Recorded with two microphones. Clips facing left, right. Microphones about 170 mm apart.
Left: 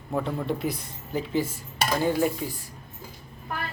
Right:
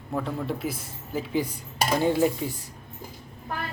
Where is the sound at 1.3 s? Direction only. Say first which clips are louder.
Right 1 dB; 20° right (ahead or behind).